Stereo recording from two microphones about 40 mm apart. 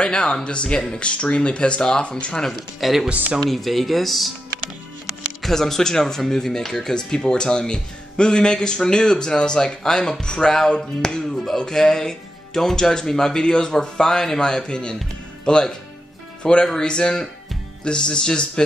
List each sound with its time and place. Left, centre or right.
0.0 s speech: left
2.8 s speech: centre
5.4 s speech: centre